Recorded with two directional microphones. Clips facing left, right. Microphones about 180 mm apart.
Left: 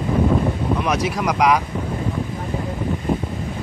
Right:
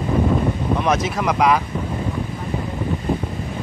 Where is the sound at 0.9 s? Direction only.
10° left (ahead or behind).